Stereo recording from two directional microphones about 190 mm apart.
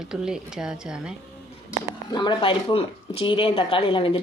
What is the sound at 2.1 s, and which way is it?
Speech, 25° left (ahead or behind).